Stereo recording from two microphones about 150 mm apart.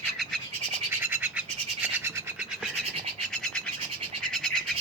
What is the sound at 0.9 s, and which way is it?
Bird, 15° right (ahead or behind).